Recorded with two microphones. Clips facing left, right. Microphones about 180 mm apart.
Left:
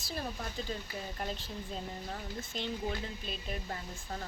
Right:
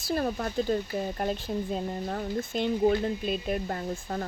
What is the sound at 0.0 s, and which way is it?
Speech, 60° right (ahead or behind).